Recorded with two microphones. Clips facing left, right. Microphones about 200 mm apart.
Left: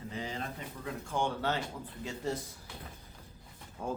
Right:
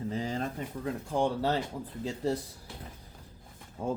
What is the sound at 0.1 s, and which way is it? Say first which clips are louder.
Pigeon: right 4 dB; 40° right (ahead or behind).